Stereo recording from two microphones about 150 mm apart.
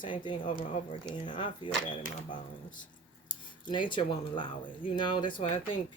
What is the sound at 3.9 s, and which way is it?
Speech, 35° left (ahead or behind).